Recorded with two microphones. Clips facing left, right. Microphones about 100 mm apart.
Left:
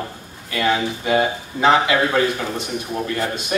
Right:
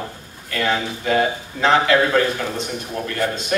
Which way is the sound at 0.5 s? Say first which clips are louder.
Left 2 dB; 15° left (ahead or behind).